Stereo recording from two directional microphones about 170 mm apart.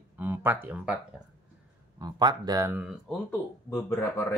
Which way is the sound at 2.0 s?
25° right (ahead or behind).